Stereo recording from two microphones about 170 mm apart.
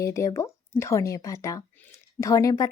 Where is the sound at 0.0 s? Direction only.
20° left (ahead or behind).